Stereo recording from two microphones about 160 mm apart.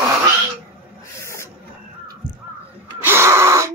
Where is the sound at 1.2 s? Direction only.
15° left (ahead or behind).